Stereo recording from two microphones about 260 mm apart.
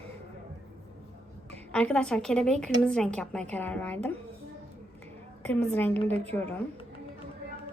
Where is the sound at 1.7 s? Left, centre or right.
Centre.